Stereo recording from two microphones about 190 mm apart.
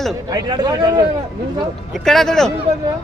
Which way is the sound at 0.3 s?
20° right (ahead or behind).